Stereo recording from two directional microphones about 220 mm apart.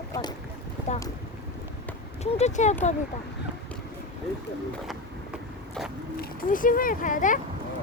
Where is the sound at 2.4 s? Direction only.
30° left (ahead or behind).